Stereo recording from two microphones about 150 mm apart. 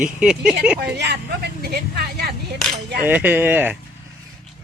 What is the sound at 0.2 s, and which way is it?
Speech, 5° right (ahead or behind).